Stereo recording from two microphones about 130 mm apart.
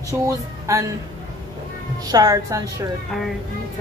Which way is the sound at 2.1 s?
30° right (ahead or behind).